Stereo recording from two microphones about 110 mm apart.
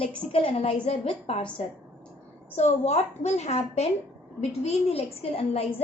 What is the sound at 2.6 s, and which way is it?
A woman's voice, 90° left.